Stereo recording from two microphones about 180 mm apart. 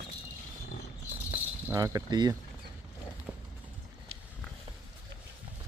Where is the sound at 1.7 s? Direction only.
20° right (ahead or behind).